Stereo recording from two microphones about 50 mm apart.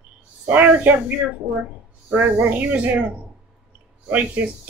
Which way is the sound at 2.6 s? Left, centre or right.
Right.